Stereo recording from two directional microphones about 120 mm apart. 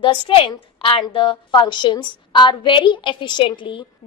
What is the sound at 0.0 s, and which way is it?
A woman's voice, 45° left (ahead or behind).